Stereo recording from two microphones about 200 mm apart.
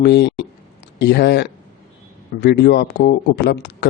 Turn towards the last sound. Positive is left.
turn(degrees=55)  # may be behind; listen again after turning